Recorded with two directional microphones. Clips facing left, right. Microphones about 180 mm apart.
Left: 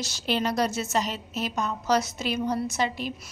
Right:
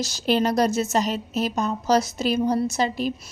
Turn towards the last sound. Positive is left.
turn(degrees=-40)  # may be behind; listen again after turning